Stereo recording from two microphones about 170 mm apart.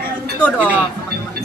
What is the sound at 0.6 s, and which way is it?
Speech, 10° right (ahead or behind).